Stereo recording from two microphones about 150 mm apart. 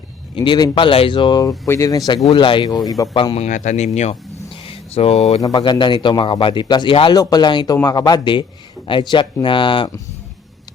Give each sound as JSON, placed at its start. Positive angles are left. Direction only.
{"t": 0.3, "sound": "speech", "side_deg": 30}
{"t": 3.2, "sound": "speech", "side_deg": 35}
{"t": 3.4, "sound": "speech", "side_deg": 50}
{"t": 4.6, "sound": "a sound", "side_deg": 40}
{"t": 5.4, "sound": "speech", "side_deg": 25}